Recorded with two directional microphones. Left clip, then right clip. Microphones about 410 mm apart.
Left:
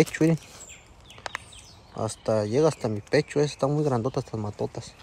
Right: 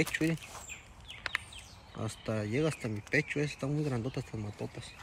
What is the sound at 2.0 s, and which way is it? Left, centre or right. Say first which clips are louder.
A man's voice: left 12 dB; centre.